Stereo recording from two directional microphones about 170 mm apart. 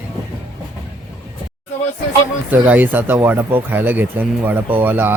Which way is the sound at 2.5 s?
10° right (ahead or behind).